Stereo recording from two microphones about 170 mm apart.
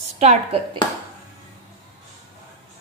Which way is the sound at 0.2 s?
40° right (ahead or behind).